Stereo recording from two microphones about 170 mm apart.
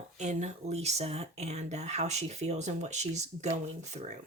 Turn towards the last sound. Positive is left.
turn(degrees=-40)  # may be behind; listen again after turning